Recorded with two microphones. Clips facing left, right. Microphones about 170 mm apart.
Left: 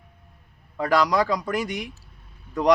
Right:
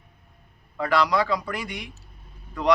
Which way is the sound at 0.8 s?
40° left (ahead or behind).